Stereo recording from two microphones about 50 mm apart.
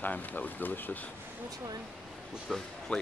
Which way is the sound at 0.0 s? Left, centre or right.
Left.